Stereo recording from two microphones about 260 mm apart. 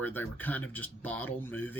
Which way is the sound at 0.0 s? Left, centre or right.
Centre.